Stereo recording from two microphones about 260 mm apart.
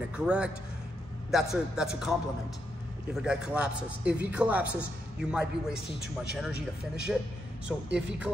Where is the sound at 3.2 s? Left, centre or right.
Centre.